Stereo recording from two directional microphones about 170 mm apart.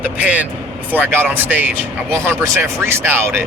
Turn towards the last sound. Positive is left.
turn(degrees=-15)  # may be behind; listen again after turning